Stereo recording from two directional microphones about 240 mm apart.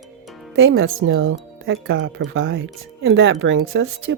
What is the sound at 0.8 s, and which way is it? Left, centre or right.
Speech, right.